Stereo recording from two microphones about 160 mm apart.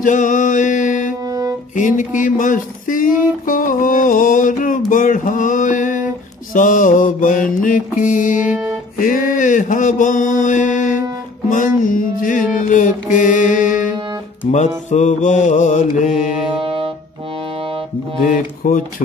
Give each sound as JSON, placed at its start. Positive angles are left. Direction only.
{"t": 0.0, "sound": "music", "side_deg": 55}
{"t": 1.2, "sound": "music", "side_deg": -20}
{"t": 1.8, "sound": "speech", "side_deg": 55}
{"t": 6.5, "sound": "mantra", "side_deg": 55}
{"t": 16.4, "sound": "music", "side_deg": -35}
{"t": 18.6, "sound": "mantra", "side_deg": 55}